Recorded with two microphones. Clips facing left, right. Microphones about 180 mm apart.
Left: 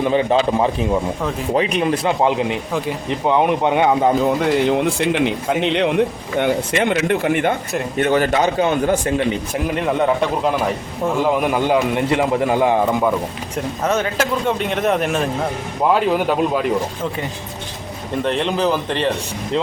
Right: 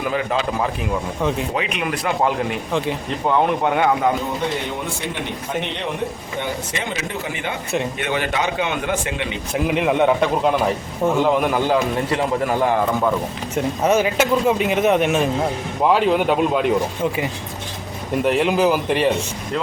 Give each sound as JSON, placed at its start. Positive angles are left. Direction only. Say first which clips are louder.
{"t": 0.0, "sound": "speech", "louder": "left 6 dB", "side_deg": 25}
{"t": 4.7, "sound": "speech", "louder": "left 9 dB", "side_deg": 90}
{"t": 6.4, "sound": "speech", "louder": "left 9 dB", "side_deg": 65}
{"t": 7.9, "sound": "a man's voice", "louder": "left 6 dB", "side_deg": 40}
{"t": 9.6, "sound": "speech", "louder": "right 1 dB", "side_deg": -5}
{"t": 12.1, "sound": "a man's voice", "louder": "left 4 dB", "side_deg": 20}
{"t": 13.6, "sound": "speech", "louder": "right 2 dB", "side_deg": -5}
{"t": 18.2, "sound": "speech", "louder": "right 2 dB", "side_deg": -10}